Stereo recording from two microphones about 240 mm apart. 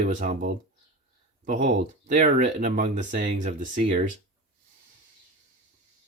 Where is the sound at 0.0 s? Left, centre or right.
Right.